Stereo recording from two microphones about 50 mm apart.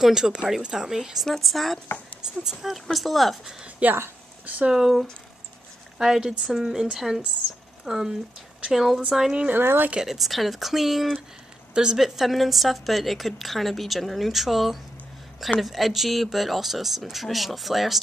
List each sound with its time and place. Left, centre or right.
0.0 s a woman's voice: centre
3.8 s speech: right
4.6 s speech: centre
5.9 s speech: centre
9.5 s speech: right
9.9 s a woman's voice: centre
11.7 s speech: centre
12.2 s a woman's voice: centre